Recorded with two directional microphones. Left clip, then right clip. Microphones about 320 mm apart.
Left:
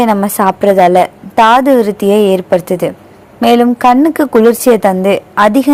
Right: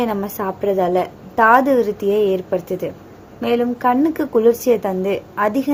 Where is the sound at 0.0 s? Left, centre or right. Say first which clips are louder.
Left 11 dB; left.